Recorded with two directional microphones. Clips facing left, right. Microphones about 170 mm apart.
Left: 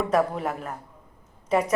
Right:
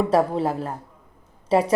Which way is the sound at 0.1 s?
30° right (ahead or behind).